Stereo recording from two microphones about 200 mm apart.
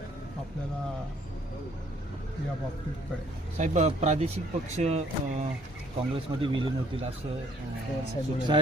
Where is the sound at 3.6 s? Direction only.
35° right (ahead or behind).